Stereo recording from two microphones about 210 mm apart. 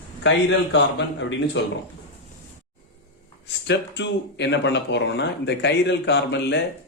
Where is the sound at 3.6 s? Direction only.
55° left (ahead or behind).